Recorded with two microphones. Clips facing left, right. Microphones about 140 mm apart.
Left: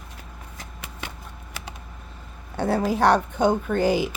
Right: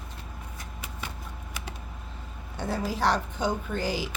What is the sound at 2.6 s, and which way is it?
A woman's voice, 60° left (ahead or behind).